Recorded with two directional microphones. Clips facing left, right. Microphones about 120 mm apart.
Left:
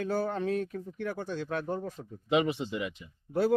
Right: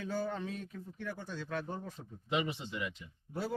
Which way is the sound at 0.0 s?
60° left (ahead or behind).